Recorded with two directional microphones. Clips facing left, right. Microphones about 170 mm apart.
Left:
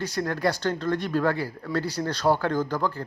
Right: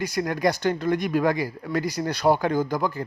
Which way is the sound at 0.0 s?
10° right (ahead or behind).